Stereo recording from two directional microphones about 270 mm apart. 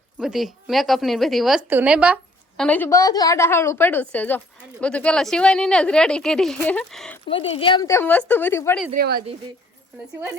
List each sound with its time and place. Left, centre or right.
0.2 s a woman's voice: centre
2.6 s a woman's voice: centre
7.3 s speech: left
8.9 s speech: right